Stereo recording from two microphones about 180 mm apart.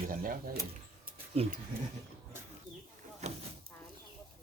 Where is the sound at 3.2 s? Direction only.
40° right (ahead or behind).